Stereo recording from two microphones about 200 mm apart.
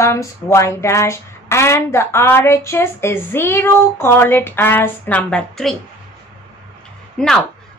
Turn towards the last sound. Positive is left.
turn(degrees=5)  # may be behind; listen again after turning